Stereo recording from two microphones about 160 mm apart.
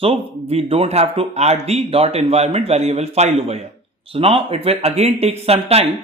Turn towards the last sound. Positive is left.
turn(degrees=-40)  # may be behind; listen again after turning